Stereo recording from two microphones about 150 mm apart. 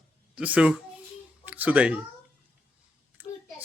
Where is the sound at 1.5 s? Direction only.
10° right (ahead or behind).